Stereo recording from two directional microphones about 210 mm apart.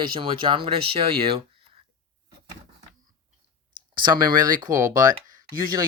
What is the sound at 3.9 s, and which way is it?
Speech, 20° right (ahead or behind).